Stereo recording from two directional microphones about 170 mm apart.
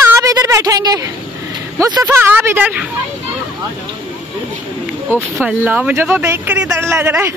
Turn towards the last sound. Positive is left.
turn(degrees=-15)  # may be behind; listen again after turning